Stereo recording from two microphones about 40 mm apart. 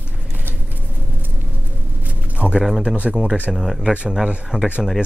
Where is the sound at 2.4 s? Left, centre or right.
Right.